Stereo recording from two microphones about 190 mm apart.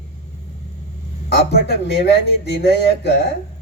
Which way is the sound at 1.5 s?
60° left (ahead or behind).